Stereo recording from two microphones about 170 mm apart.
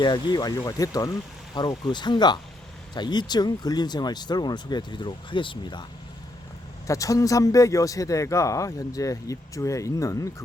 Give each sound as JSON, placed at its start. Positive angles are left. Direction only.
{"t": 0.0, "sound": "speech", "side_deg": 25}
{"t": 6.8, "sound": "speech", "side_deg": 20}